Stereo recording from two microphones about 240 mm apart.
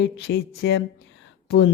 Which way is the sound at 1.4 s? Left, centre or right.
Left.